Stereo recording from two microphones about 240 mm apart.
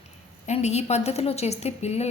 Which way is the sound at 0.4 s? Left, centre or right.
Left.